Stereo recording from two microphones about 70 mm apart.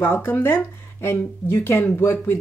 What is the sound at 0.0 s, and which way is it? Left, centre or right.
Speech, left.